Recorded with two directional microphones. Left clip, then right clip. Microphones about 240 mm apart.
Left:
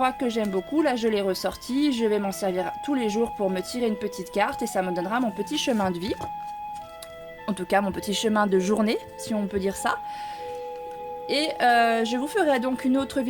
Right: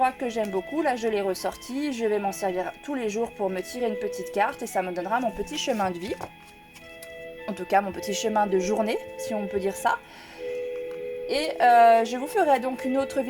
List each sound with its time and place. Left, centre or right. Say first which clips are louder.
0.0 s speech: even; left
7.4 s speech: even; left
11.3 s speech: right 1 dB; left